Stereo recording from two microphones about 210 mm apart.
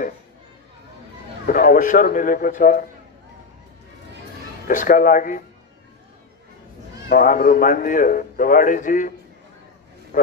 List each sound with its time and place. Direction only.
1.4 s a man's voice: 40° left (ahead or behind)
4.6 s a man's voice: 40° left (ahead or behind)
7.1 s a man's voice: 40° left (ahead or behind)
10.1 s a man's voice: 40° left (ahead or behind)